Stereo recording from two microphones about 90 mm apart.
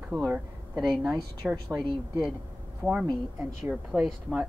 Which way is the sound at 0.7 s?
Centre (ahead or behind).